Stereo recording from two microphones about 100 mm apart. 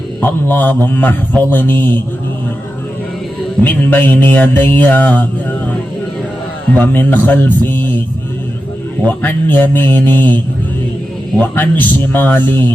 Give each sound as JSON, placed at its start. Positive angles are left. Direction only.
{"t": 0.2, "sound": "mantra", "side_deg": 20}
{"t": 3.6, "sound": "mantra", "side_deg": 20}
{"t": 6.7, "sound": "mantra", "side_deg": 15}
{"t": 9.0, "sound": "mantra", "side_deg": 20}
{"t": 11.3, "sound": "mantra", "side_deg": 20}